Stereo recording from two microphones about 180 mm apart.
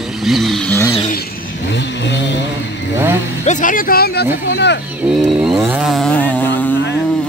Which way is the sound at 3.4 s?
50° left (ahead or behind).